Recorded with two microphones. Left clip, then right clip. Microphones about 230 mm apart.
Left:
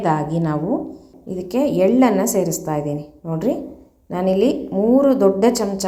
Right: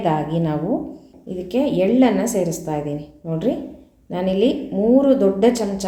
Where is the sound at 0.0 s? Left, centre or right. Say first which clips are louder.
Left 1 dB; centre.